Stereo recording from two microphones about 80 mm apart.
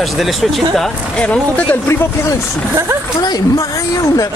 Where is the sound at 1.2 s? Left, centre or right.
Centre.